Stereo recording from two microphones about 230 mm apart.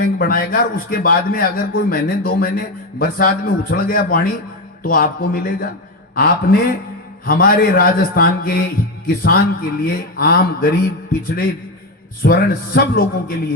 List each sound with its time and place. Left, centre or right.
0.0 s a man's voice: left
12.2 s a man's voice: left